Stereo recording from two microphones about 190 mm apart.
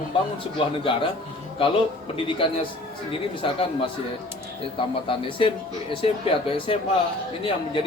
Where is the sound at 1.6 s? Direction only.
30° left (ahead or behind).